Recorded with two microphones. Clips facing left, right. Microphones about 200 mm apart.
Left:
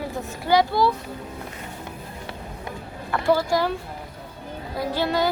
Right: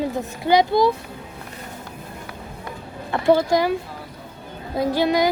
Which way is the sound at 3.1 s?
20° right (ahead or behind).